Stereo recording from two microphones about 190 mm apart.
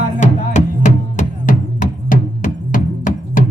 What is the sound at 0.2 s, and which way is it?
Music, 40° left (ahead or behind).